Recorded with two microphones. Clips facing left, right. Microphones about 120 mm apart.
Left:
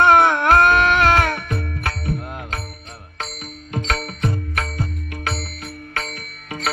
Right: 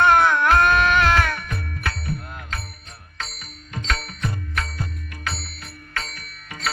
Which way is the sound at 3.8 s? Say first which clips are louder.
Left 4 dB; 55° left (ahead or behind).